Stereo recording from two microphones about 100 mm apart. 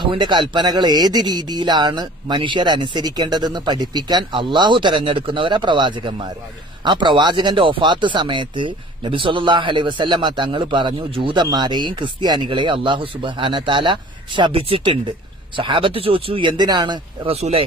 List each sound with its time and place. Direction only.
0.0 s speech: 50° right (ahead or behind)
17.3 s speech: 80° right